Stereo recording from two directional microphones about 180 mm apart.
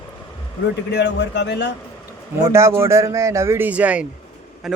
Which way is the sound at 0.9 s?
75° left (ahead or behind).